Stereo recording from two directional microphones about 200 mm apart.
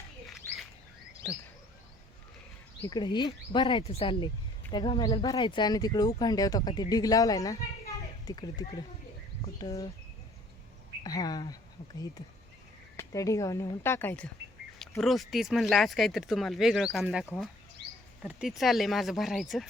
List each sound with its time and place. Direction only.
0.3 s bird: centre (ahead or behind)
2.8 s speech: 20° left (ahead or behind)
11.0 s speech: 20° left (ahead or behind)
13.0 s speech: 15° left (ahead or behind)
15.0 s speech: centre (ahead or behind)